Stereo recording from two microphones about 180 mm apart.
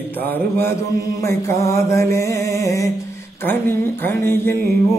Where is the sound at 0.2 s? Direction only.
10° left (ahead or behind).